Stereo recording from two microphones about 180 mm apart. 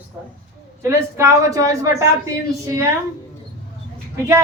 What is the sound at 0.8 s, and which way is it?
Speech, 15° right (ahead or behind).